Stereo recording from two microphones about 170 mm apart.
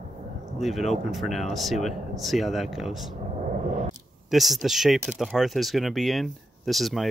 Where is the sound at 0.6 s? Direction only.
Centre (ahead or behind).